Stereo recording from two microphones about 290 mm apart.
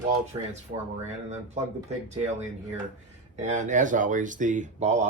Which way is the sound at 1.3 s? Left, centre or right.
Right.